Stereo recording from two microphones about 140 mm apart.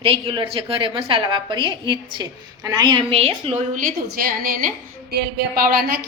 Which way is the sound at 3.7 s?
85° right.